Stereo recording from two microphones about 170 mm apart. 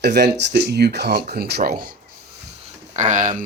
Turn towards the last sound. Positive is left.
turn(degrees=-50)  # may be behind; listen again after turning